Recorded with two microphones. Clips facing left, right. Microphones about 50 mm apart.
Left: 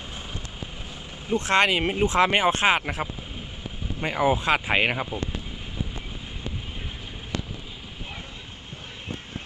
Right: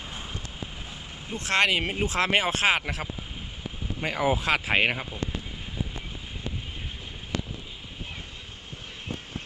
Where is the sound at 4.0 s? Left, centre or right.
Left.